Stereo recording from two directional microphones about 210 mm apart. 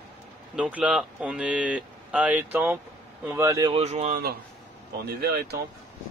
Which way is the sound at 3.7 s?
30° right (ahead or behind).